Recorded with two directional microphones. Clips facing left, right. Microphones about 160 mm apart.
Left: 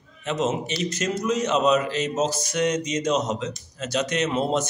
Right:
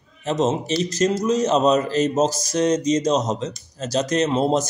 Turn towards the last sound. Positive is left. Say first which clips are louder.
# right 4 dB
turn(degrees=-35)  # may be behind; listen again after turning